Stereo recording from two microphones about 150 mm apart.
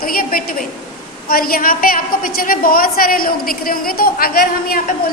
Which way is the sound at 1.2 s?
80° left.